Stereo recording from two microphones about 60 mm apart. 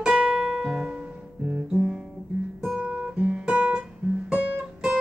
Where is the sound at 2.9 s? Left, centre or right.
Right.